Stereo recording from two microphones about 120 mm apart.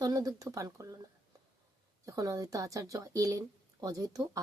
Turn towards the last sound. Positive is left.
turn(degrees=-30)  # may be behind; listen again after turning